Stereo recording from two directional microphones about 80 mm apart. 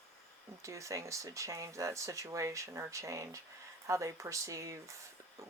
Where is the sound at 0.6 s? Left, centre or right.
Right.